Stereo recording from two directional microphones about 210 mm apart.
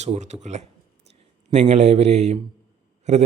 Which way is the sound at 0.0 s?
30° right (ahead or behind).